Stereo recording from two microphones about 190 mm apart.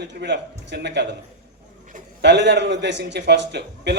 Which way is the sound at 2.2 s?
65° right (ahead or behind).